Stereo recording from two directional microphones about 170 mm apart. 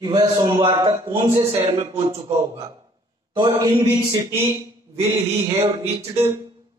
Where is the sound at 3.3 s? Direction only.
25° right (ahead or behind).